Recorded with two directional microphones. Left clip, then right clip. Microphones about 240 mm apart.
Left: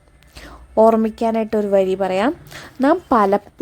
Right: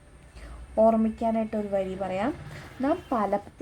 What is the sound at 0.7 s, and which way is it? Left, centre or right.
A woman's voice, left.